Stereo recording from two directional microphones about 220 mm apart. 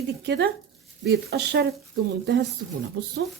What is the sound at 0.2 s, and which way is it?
Speech, 50° right (ahead or behind).